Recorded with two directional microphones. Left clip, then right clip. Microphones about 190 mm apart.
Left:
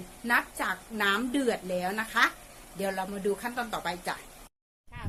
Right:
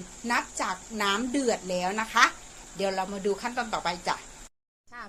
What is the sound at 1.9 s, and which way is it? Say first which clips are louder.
Speech: right 4 dB; 10° left (ahead or behind).